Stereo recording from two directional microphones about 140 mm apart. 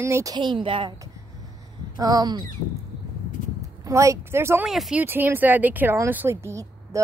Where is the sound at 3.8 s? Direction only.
20° right (ahead or behind).